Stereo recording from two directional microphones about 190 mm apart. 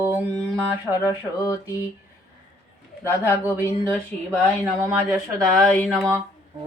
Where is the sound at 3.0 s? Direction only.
15° left (ahead or behind).